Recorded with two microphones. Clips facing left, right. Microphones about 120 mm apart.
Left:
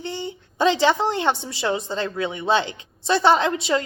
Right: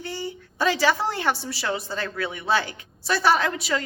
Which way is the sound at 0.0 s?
25° left (ahead or behind).